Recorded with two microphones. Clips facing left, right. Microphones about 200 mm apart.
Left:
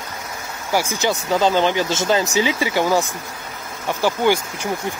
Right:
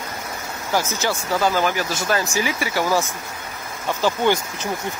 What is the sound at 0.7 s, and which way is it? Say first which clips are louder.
Speech: left 2 dB; 15° left (ahead or behind).